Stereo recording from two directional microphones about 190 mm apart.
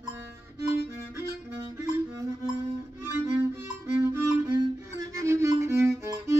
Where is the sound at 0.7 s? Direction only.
15° right (ahead or behind).